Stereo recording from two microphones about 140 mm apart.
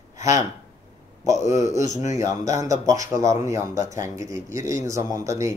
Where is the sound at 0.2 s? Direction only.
20° right (ahead or behind).